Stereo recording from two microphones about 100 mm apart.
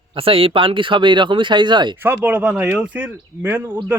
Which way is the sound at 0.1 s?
65° right (ahead or behind).